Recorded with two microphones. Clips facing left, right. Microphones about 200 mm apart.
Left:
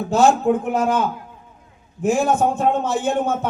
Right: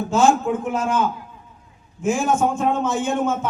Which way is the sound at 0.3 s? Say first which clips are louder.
Left 2 dB; 60° left (ahead or behind).